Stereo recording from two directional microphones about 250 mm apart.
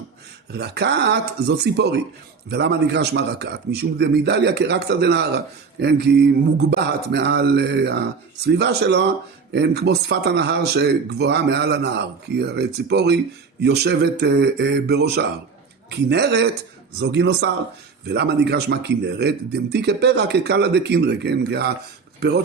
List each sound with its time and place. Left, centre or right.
0.5 s speech: right